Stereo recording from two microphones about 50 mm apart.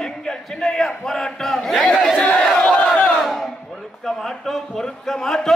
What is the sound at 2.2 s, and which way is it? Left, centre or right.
Battle cry, left.